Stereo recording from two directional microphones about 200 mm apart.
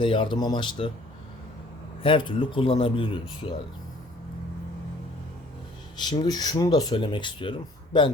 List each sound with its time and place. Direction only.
0.0 s speech: 25° left (ahead or behind)
2.0 s speech: 25° left (ahead or behind)
6.0 s speech: 20° left (ahead or behind)